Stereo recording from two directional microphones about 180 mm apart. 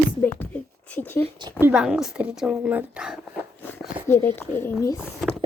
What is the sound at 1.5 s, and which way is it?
Speech, 10° right (ahead or behind).